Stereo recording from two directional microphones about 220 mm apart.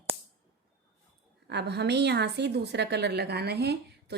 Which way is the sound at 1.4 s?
50° right (ahead or behind).